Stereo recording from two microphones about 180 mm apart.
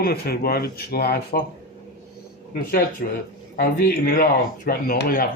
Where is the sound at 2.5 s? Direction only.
55° left (ahead or behind).